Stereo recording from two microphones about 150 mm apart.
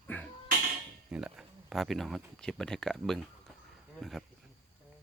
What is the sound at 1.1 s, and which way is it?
Speech, 5° right (ahead or behind).